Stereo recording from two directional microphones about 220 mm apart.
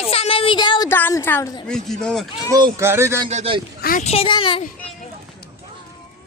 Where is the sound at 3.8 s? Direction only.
40° left (ahead or behind); by 4.6 s 25° left (ahead or behind).